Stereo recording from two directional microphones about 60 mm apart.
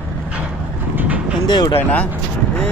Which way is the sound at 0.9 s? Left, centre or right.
Right.